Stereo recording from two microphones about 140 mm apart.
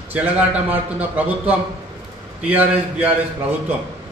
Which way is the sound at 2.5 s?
10° right (ahead or behind).